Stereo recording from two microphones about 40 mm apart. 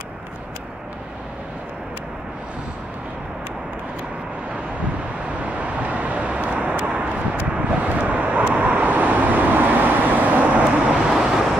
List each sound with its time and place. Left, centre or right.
5.4 s vehicle: right
11.1 s vehicle: centre